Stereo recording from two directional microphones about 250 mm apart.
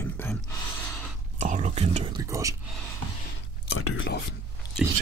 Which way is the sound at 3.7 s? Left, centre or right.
Left.